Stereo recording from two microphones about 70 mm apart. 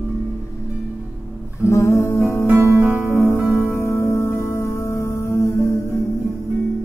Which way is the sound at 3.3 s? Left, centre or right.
Left.